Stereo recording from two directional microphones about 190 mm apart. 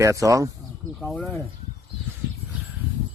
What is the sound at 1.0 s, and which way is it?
Speech, 5° left (ahead or behind).